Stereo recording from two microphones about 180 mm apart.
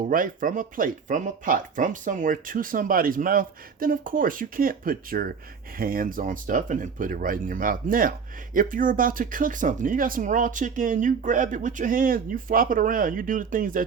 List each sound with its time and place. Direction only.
0.1 s speech: 50° right (ahead or behind)